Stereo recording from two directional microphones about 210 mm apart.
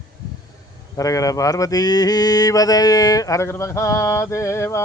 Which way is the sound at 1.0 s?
15° left (ahead or behind).